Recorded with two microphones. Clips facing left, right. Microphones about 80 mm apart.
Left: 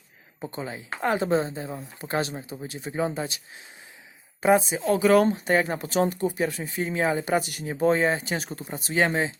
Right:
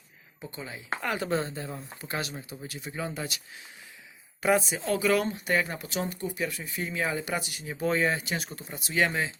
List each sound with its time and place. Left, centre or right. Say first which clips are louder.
0.4 s speech: left 5 dB; left; by 2.0 s centre
2.0 s speech: left 7 dB; left
4.4 s speech: left 5 dB; left